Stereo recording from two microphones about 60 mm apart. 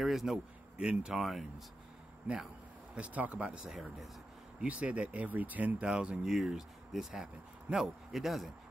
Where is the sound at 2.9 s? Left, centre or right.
Right.